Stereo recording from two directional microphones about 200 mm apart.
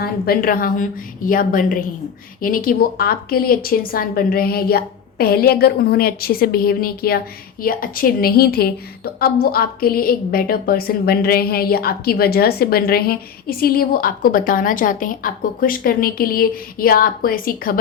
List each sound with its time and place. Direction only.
0.0 s a woman's voice: 50° left (ahead or behind)